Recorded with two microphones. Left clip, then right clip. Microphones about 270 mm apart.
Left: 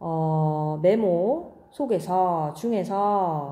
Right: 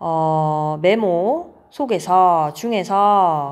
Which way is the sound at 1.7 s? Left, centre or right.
Right.